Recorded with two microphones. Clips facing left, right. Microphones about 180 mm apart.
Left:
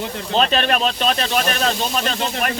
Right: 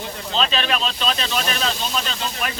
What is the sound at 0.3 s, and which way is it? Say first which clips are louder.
Speech: left 5 dB; 50° left (ahead or behind).